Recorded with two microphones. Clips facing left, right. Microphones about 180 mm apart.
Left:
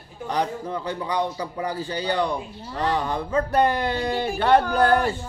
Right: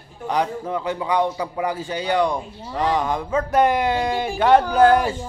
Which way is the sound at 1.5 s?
10° right (ahead or behind).